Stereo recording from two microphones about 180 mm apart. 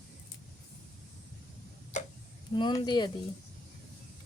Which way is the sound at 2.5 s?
25° left (ahead or behind).